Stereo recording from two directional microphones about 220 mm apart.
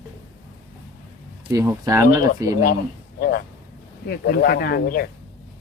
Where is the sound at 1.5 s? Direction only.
15° right (ahead or behind).